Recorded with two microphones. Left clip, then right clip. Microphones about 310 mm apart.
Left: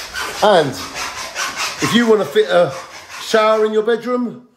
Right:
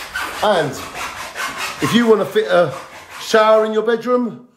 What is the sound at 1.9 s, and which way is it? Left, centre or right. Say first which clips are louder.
Speech: even; centre.